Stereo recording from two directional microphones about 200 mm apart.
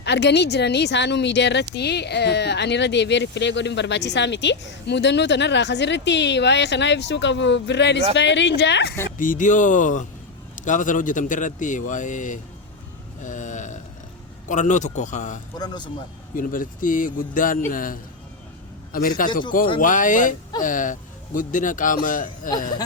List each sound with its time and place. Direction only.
0.0 s speech: 60° left (ahead or behind)
9.1 s a man's voice: 40° left (ahead or behind)
13.2 s burping: 40° left (ahead or behind)
14.4 s a man's voice: 40° left (ahead or behind)
15.5 s speech: 20° left (ahead or behind)
16.3 s a man's voice: 45° left (ahead or behind)